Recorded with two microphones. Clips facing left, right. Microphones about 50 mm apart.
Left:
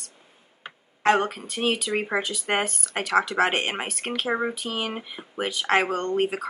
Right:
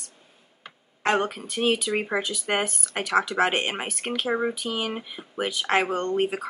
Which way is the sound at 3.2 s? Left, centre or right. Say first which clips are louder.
Left 1 dB; left.